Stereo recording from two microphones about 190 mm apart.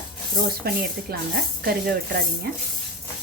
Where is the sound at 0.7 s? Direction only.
55° right (ahead or behind).